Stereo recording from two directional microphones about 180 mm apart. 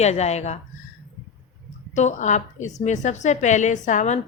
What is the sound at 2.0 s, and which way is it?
A woman's voice, 40° left (ahead or behind).